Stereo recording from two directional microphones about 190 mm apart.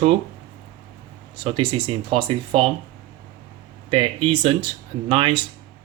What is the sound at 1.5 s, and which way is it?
Speech, 30° right (ahead or behind).